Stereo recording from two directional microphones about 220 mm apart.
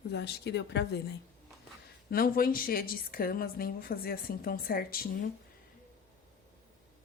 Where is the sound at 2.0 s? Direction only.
45° left (ahead or behind).